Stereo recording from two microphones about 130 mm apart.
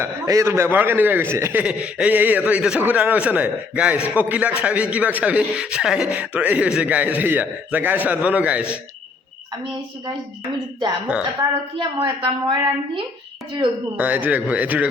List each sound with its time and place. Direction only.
0.0 s a man's voice: 20° right (ahead or behind)
1.6 s a man's voice: 10° right (ahead or behind)
11.3 s a woman's voice: 40° right (ahead or behind)
13.9 s a man's voice: 15° right (ahead or behind)